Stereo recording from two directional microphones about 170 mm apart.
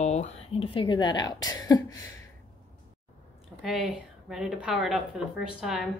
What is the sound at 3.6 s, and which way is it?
Speech, centre (ahead or behind).